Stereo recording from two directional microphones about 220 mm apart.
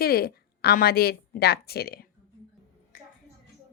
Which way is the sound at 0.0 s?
45° left (ahead or behind).